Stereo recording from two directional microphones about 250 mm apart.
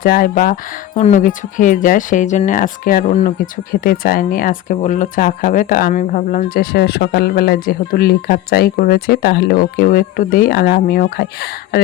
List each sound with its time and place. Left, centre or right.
0.0 s speech: left